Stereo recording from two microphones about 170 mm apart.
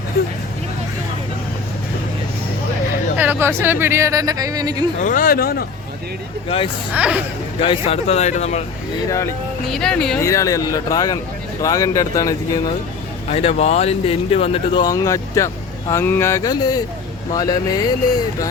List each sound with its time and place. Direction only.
3.2 s speech: 10° right (ahead or behind)
4.9 s speech: 50° left (ahead or behind)
6.9 s speech: 5° right (ahead or behind)
7.6 s speech: 35° left (ahead or behind)
9.0 s speech: 15° left (ahead or behind)
9.6 s speech: 5° left (ahead or behind)
10.2 s speech: 20° left (ahead or behind)
13.3 s speech: 35° left (ahead or behind)